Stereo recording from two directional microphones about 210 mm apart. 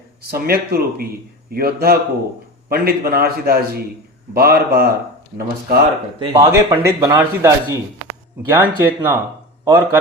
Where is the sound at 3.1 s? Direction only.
45° right (ahead or behind).